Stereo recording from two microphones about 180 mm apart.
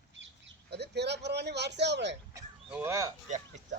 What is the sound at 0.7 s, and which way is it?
Speech, 70° right (ahead or behind).